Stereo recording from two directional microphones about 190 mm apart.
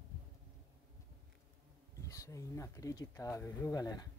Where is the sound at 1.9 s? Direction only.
15° left (ahead or behind).